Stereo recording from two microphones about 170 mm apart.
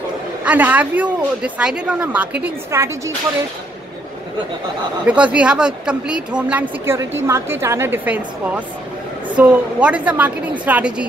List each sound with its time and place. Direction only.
0.4 s speech: 10° right (ahead or behind)
5.0 s speech: 5° right (ahead or behind)